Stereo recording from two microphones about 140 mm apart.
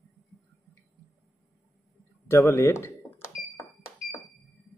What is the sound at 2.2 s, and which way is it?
Speech, 20° left (ahead or behind).